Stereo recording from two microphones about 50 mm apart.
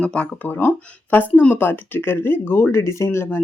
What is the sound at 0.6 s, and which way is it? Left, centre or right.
Speech, left.